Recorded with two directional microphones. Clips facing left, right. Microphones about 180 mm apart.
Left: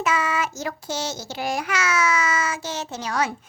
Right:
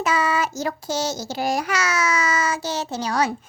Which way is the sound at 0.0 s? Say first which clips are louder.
Right 2 dB; 35° right (ahead or behind).